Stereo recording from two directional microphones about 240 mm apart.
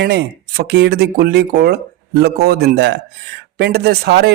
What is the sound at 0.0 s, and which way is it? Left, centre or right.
A man's voice, right.